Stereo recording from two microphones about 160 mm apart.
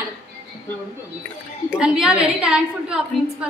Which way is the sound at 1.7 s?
5° right (ahead or behind).